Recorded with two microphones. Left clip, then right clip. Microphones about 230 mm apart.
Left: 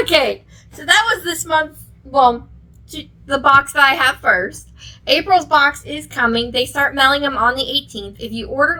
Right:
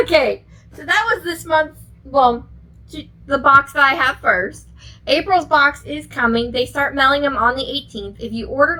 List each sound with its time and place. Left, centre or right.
0.0 s a woman's voice: left